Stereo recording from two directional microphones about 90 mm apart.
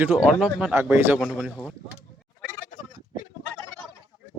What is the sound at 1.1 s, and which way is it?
Speech, 10° right (ahead or behind).